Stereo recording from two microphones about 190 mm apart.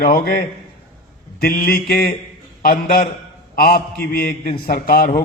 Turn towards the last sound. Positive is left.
turn(degrees=50)  # may be behind; listen again after turning